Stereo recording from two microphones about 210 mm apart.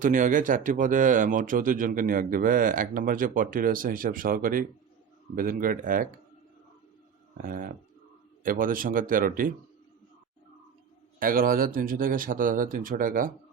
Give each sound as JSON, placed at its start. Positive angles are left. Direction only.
{"t": 0.0, "sound": "speech", "side_deg": -40}
{"t": 7.4, "sound": "speech", "side_deg": -40}
{"t": 11.2, "sound": "speech", "side_deg": -45}